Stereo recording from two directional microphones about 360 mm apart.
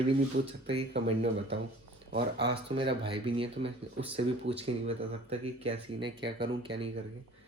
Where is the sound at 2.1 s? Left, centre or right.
Centre.